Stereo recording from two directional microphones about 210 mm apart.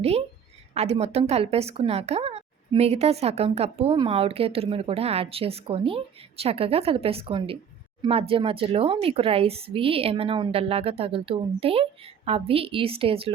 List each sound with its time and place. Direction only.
0.0 s a woman's voice: 30° right (ahead or behind)